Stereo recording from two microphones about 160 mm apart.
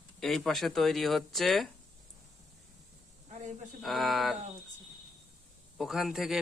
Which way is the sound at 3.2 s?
45° right (ahead or behind).